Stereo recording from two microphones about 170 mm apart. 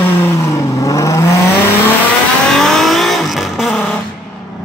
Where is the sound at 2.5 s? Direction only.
Centre (ahead or behind).